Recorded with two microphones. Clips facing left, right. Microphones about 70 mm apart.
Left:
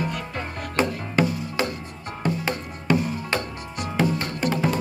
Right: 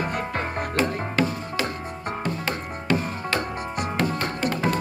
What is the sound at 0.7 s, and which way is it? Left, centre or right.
Music, left.